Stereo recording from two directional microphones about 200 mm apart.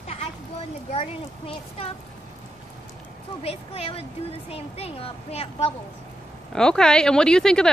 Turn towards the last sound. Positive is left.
turn(degrees=5)  # may be behind; listen again after turning